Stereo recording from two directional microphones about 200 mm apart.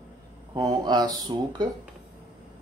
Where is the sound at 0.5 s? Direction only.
20° right (ahead or behind).